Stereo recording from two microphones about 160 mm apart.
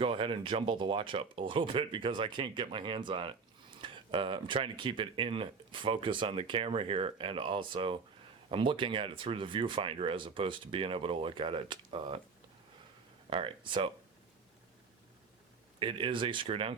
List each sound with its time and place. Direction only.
0.0 s speech: 35° right (ahead or behind)
13.3 s speech: 35° right (ahead or behind)
15.8 s speech: 35° right (ahead or behind)